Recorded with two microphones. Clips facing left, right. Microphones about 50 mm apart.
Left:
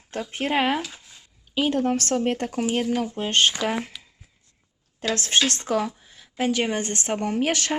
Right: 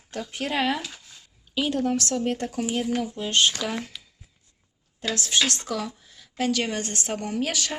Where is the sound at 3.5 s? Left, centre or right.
Left.